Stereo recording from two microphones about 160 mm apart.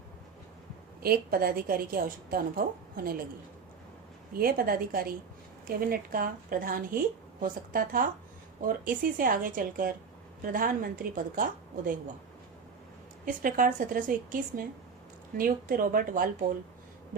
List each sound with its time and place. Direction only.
1.0 s a woman's voice: 70° right (ahead or behind)
4.4 s a woman's voice: 65° right (ahead or behind)
13.2 s a woman's voice: 60° right (ahead or behind)